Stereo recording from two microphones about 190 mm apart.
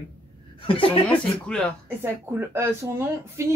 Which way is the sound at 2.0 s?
10° right (ahead or behind).